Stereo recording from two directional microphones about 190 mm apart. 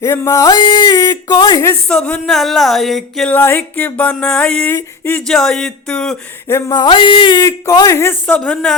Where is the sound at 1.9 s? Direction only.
5° left (ahead or behind).